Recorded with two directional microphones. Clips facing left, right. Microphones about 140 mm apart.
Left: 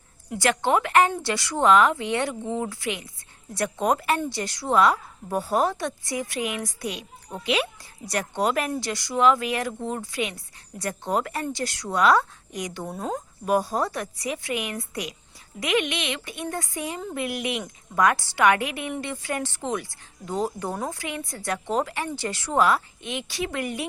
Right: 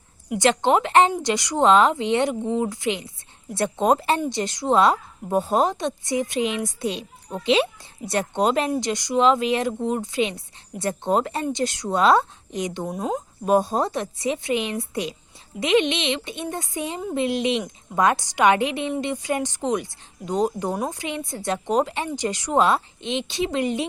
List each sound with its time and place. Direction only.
0.3 s a woman's voice: 20° right (ahead or behind)